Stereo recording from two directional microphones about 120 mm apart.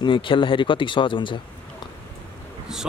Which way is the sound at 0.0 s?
45° left (ahead or behind).